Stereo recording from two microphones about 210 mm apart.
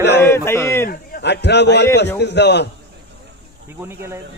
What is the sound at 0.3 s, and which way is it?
Speech, 10° left (ahead or behind).